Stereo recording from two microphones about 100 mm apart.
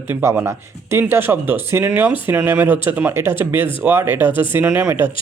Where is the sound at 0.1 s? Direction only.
25° right (ahead or behind).